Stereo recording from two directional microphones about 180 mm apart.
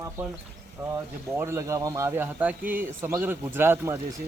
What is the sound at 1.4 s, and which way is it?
Speech, 15° right (ahead or behind).